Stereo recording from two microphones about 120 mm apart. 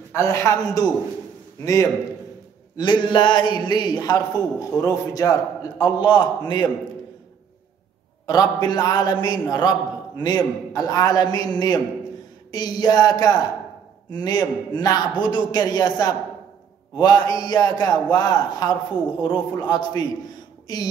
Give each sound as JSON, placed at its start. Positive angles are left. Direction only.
{"t": 0.1, "sound": "a man's voice", "side_deg": 25}
{"t": 2.8, "sound": "a man's voice", "side_deg": 40}
{"t": 5.8, "sound": "a man's voice", "side_deg": 40}
{"t": 8.3, "sound": "a man's voice", "side_deg": 35}